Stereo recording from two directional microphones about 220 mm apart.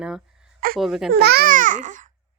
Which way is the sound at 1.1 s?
45° right (ahead or behind).